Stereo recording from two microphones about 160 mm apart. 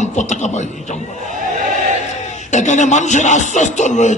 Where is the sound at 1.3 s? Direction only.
50° right (ahead or behind).